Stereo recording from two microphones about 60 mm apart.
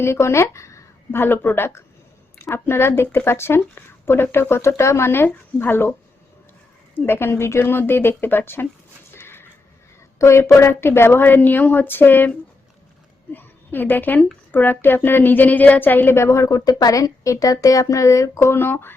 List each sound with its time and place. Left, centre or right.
0.0 s speech: left
1.1 s a woman's voice: left
6.9 s a woman's voice: left
9.1 s a sound: left
10.2 s a woman's voice: left
13.3 s a woman's voice: left
16.1 s a woman's voice: left